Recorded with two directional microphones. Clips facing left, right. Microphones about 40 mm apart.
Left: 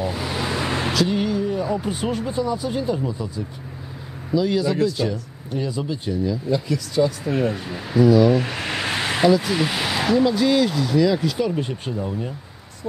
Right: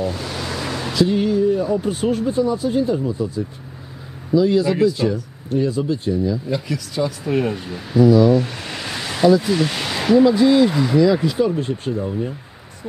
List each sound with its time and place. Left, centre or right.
0.0 s vehicle: centre
1.0 s speech: centre
6.5 s speech: centre
8.4 s a sound: left
9.3 s speech: centre
11.6 s speech: centre